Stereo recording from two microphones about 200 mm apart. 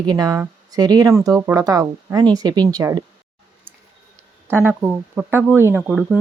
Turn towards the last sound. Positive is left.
turn(degrees=-10)  # may be behind; listen again after turning